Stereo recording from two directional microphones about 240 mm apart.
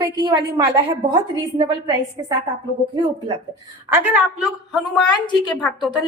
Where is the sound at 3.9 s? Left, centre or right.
Centre.